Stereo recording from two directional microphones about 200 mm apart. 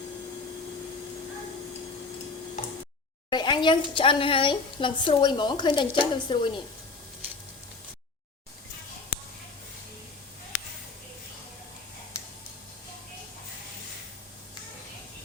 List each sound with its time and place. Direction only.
3.2 s a woman's voice: 20° left (ahead or behind)